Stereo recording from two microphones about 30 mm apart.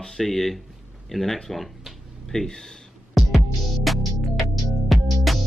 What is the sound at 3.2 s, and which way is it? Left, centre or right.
Music, centre.